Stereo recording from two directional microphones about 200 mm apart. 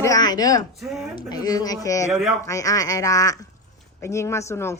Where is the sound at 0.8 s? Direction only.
5° right (ahead or behind).